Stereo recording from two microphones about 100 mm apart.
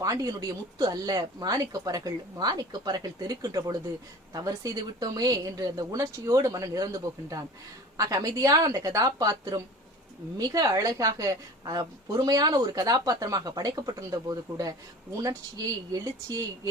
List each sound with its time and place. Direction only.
0.0 s a woman's voice: 35° right (ahead or behind)